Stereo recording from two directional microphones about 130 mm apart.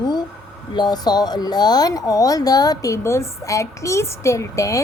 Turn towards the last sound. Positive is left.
turn(degrees=25)  # may be behind; listen again after turning